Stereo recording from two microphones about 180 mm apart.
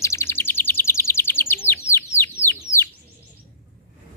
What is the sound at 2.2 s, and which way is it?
Bird, 15° left (ahead or behind).